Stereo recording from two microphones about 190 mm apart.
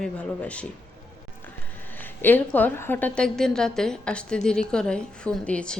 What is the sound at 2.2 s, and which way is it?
A woman's voice, 10° left (ahead or behind).